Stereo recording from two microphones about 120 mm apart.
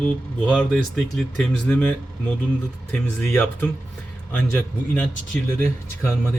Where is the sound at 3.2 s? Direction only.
20° left (ahead or behind).